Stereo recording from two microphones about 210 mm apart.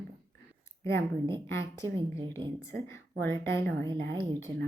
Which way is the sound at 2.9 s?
10° left (ahead or behind).